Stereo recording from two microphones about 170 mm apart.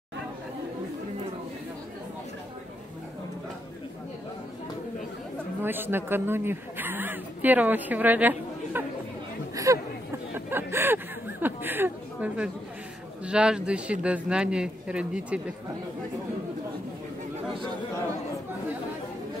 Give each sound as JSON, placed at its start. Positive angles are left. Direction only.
{"t": 5.6, "sound": "speech", "side_deg": -10}
{"t": 10.3, "sound": "a sound", "side_deg": -15}
{"t": 13.2, "sound": "speech", "side_deg": -5}